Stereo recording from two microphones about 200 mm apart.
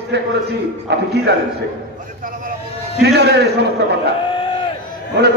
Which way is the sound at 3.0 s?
55° right (ahead or behind).